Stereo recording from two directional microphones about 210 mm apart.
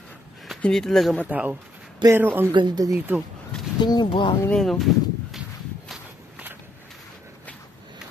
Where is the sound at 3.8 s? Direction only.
20° left (ahead or behind).